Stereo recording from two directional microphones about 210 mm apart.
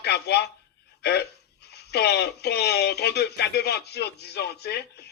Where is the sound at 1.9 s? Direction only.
50° left (ahead or behind).